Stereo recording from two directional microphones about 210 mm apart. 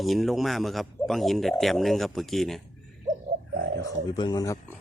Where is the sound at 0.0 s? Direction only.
Centre (ahead or behind).